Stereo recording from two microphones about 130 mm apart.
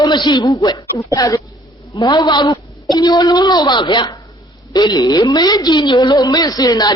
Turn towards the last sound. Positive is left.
turn(degrees=30)  # may be behind; listen again after turning